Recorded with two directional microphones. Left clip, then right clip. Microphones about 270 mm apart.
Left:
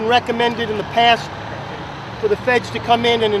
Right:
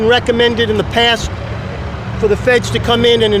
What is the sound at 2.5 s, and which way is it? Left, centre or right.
Speech, right.